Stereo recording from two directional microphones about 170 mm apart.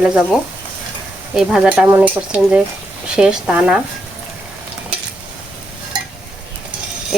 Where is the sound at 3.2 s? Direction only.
5° right (ahead or behind).